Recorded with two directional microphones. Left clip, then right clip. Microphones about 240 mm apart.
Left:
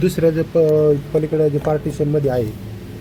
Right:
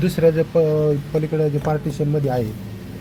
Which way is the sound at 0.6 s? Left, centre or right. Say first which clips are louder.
Left 4 dB; right.